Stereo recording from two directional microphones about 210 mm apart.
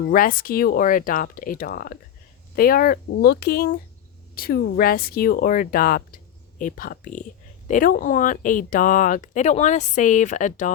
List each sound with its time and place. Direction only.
0.0 s speech: 40° left (ahead or behind)